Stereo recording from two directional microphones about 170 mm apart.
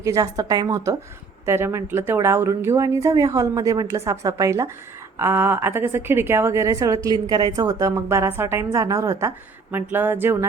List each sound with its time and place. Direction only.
0.0 s a woman's voice: 20° right (ahead or behind)